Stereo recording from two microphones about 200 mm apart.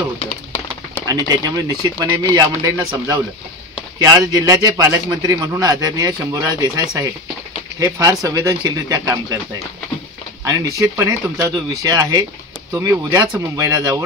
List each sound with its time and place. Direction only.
1.0 s a man's voice: 20° right (ahead or behind)
10.4 s speech: 15° right (ahead or behind)